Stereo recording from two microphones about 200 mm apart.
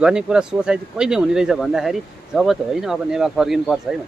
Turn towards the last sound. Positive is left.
turn(degrees=0)  # may be behind; listen again after turning